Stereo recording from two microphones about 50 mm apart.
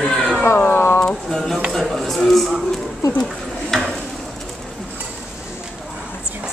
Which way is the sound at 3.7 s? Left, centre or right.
Centre.